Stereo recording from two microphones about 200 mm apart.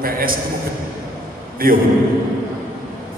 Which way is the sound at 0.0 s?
45° right (ahead or behind).